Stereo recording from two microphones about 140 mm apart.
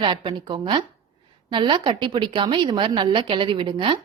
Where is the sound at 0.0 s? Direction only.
35° right (ahead or behind).